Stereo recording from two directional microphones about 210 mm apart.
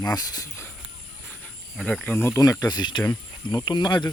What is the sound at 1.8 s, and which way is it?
Speech, 5° left (ahead or behind).